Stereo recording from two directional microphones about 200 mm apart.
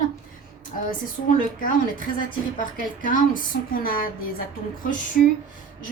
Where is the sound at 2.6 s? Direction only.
40° left (ahead or behind).